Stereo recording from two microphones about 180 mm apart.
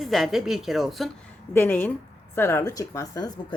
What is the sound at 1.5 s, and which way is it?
Speech, 10° left (ahead or behind).